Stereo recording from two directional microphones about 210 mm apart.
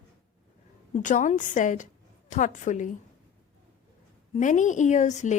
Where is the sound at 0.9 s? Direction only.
35° left (ahead or behind).